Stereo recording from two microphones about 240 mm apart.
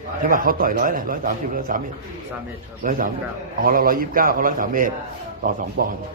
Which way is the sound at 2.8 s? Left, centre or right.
Right.